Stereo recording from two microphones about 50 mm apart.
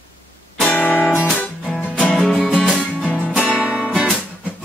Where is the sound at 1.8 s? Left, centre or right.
Left.